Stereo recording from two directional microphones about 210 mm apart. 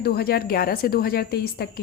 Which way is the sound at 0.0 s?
45° left (ahead or behind).